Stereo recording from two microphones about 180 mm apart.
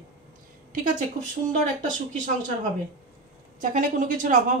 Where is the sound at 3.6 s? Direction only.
45° right (ahead or behind).